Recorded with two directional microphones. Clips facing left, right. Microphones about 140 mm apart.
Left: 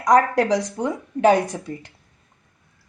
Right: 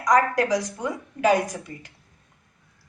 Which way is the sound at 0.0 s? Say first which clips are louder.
Left 3 dB; 25° left (ahead or behind).